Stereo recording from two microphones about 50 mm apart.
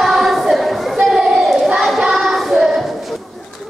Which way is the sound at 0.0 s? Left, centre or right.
Centre.